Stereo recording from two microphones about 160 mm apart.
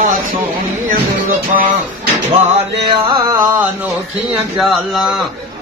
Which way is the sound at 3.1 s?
25° right (ahead or behind).